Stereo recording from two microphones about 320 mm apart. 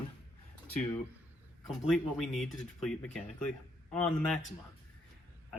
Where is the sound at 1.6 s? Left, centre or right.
Centre.